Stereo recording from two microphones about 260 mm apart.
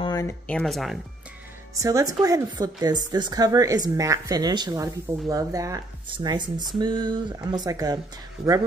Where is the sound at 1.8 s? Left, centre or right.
Centre.